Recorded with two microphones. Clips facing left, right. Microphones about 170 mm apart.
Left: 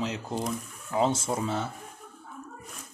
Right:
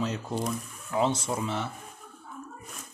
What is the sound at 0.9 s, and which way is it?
Speech, 35° left (ahead or behind).